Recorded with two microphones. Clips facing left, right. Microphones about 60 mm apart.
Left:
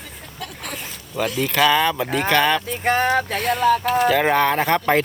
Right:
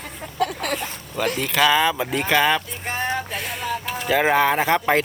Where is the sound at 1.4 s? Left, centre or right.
Centre.